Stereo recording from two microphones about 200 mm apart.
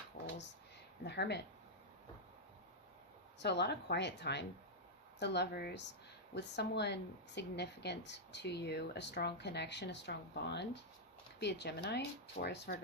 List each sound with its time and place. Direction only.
1.0 s speech: 55° left (ahead or behind)
3.4 s speech: 55° left (ahead or behind)